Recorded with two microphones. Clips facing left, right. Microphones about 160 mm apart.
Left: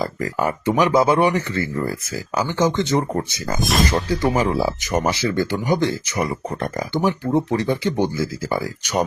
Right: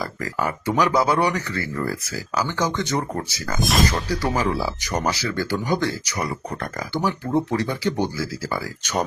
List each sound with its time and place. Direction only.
0.0 s speech: 20° left (ahead or behind)
3.6 s speech: centre (ahead or behind)
4.4 s speech: 20° left (ahead or behind)